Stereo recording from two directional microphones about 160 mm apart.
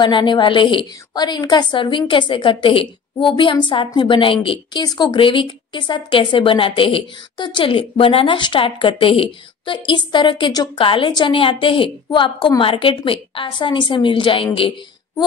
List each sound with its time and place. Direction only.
0.0 s a woman's voice: 30° left (ahead or behind)